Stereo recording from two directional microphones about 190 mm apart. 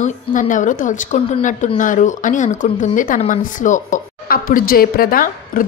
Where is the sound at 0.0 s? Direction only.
45° left (ahead or behind).